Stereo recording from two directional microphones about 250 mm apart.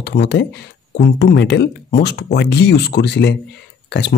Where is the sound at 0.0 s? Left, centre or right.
Left.